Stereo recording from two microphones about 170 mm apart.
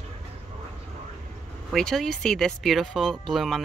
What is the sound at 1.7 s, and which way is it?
Speech, centre (ahead or behind).